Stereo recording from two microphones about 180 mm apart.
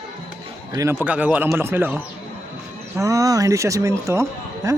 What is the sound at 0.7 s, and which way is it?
Speech, 15° right (ahead or behind).